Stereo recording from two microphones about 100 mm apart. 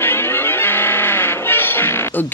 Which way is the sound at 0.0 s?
25° left (ahead or behind).